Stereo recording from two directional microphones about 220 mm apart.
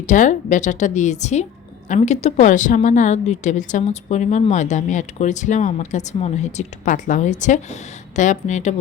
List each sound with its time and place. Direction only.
0.1 s a woman's voice: 35° left (ahead or behind)